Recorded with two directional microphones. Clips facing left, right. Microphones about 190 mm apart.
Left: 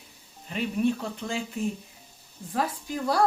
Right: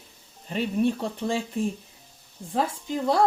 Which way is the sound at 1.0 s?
30° right (ahead or behind).